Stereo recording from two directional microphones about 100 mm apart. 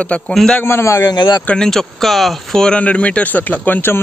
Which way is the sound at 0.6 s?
25° left (ahead or behind).